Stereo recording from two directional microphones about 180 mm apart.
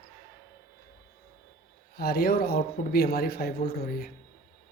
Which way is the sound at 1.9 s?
60° left (ahead or behind).